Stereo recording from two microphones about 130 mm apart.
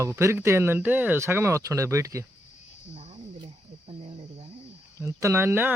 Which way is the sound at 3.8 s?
50° right (ahead or behind).